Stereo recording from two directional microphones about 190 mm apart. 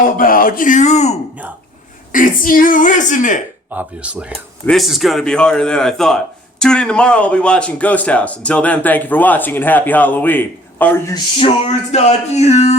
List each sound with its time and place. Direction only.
0.2 s a woman's voice: 50° left (ahead or behind)
2.1 s a woman's voice: 45° left (ahead or behind)
3.7 s a man's voice: 5° right (ahead or behind); by 11.1 s 10° left (ahead or behind)
11.1 s speech: 30° left (ahead or behind)